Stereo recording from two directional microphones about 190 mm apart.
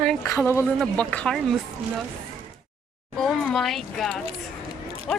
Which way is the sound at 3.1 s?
Centre (ahead or behind).